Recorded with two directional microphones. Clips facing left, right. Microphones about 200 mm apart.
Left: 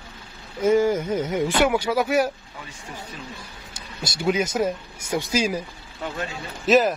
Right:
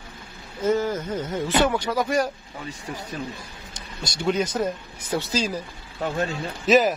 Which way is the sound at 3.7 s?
5° left (ahead or behind).